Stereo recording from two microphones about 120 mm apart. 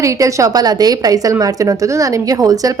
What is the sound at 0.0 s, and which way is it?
A woman's voice, 25° right (ahead or behind).